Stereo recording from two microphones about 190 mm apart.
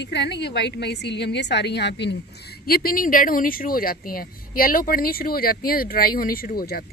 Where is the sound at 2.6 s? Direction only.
50° left (ahead or behind).